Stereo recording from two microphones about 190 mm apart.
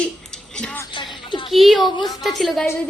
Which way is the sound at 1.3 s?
25° left (ahead or behind).